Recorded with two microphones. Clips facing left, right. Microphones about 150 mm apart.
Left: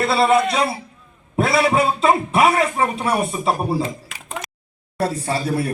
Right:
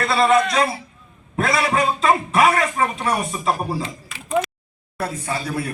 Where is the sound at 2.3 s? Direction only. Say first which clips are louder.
Left 1 dB; 25° left (ahead or behind).